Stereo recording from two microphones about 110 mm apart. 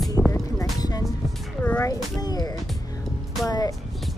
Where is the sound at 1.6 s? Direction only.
15° left (ahead or behind).